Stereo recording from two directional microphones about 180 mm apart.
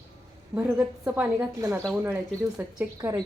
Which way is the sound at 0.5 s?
10° right (ahead or behind).